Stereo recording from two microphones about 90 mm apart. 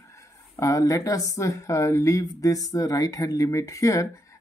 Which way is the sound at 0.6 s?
35° left (ahead or behind).